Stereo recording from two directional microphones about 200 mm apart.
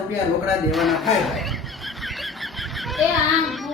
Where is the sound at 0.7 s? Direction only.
Centre (ahead or behind).